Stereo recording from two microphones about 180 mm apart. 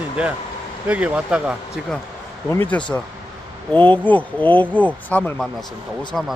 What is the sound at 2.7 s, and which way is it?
Speech, 5° left (ahead or behind).